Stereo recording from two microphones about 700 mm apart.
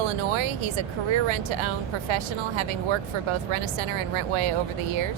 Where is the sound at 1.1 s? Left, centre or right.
Right.